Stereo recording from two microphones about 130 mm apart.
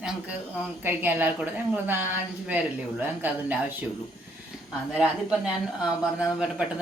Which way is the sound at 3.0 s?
15° right (ahead or behind).